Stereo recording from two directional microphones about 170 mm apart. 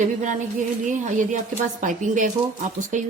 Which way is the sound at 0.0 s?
45° right (ahead or behind).